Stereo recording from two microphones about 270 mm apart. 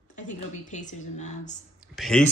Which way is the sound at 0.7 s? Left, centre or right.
Left.